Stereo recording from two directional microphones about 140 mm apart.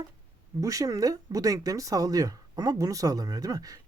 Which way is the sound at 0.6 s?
25° right (ahead or behind).